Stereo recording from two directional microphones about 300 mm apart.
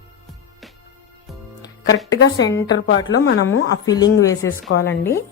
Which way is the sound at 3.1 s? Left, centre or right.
Left.